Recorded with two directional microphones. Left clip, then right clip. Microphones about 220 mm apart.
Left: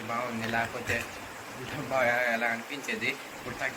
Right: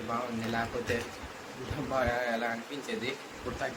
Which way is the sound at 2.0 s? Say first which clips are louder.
Left 5 dB; 15° right (ahead or behind).